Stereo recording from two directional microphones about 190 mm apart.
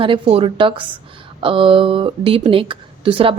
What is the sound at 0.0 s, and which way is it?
Speech, 30° right (ahead or behind).